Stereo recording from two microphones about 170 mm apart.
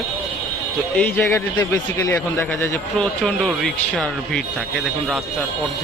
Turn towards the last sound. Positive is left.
turn(degrees=5)  # may be behind; listen again after turning